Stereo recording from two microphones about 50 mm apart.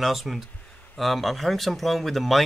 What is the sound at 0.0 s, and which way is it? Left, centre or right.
Speech, centre.